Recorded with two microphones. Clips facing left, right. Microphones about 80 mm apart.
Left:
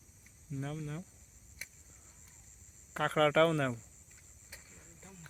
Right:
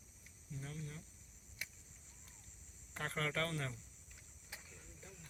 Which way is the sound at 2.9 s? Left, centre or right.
Left.